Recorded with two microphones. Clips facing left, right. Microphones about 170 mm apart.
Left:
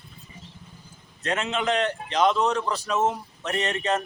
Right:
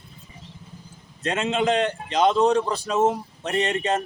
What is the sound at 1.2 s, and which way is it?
A man's voice, 30° right (ahead or behind).